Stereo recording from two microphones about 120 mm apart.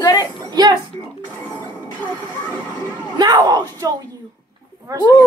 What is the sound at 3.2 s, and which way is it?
Speech, 35° right (ahead or behind).